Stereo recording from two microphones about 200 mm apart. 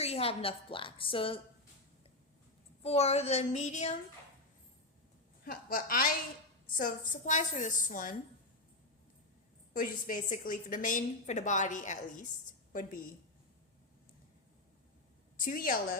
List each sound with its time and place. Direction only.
0.0 s a woman's voice: 30° left (ahead or behind)
2.8 s a woman's voice: 30° left (ahead or behind)
5.5 s a woman's voice: 45° left (ahead or behind)
9.7 s a woman's voice: 45° left (ahead or behind)
15.4 s a woman's voice: 45° left (ahead or behind)